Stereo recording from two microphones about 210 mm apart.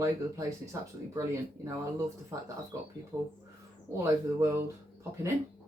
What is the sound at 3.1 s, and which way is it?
Speech, 20° right (ahead or behind).